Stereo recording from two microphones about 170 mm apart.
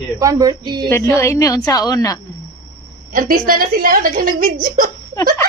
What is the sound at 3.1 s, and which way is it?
A woman's voice, 55° right (ahead or behind).